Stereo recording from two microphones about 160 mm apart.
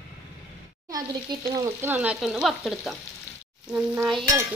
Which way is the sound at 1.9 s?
10° right (ahead or behind).